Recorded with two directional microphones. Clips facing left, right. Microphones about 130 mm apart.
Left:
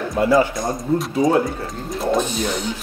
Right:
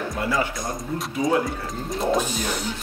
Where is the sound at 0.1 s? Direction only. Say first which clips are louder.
Left 11 dB; 25° left (ahead or behind).